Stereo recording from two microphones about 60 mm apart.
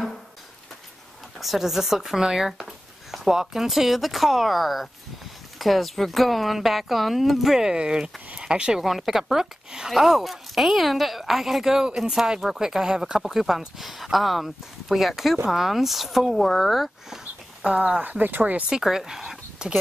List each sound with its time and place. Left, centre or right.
1.4 s speech: centre
8.8 s speech: centre
17.7 s speech: right
18.7 s speech: centre